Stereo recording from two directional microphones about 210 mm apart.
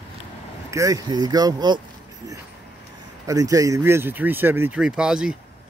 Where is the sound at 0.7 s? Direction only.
15° right (ahead or behind).